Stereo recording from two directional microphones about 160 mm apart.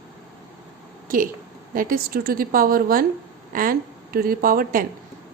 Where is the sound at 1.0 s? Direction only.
60° right (ahead or behind).